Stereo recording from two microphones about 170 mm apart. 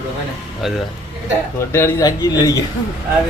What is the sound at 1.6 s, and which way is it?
Speech, 15° left (ahead or behind).